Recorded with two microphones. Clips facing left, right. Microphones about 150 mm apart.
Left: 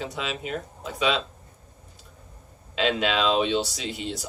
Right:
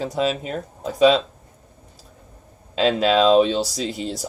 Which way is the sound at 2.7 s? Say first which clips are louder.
Right 7 dB; 40° right (ahead or behind).